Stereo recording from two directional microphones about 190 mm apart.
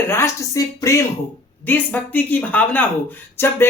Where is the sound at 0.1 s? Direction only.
15° left (ahead or behind).